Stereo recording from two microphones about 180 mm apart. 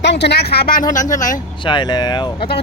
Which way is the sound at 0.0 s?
75° left (ahead or behind).